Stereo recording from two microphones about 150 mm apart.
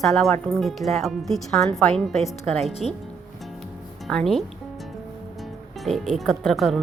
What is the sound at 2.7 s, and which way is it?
Speech, 45° left (ahead or behind).